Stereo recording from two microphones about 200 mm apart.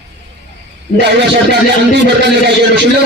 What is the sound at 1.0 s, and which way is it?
Speech, 60° right (ahead or behind).